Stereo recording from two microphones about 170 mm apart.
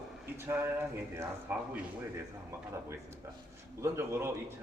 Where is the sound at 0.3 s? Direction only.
10° right (ahead or behind).